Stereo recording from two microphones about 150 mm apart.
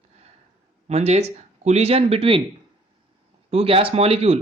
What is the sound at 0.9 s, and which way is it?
Speech, 45° right (ahead or behind).